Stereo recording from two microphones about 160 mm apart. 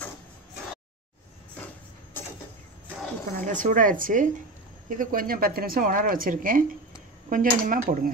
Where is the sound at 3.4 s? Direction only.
55° right (ahead or behind).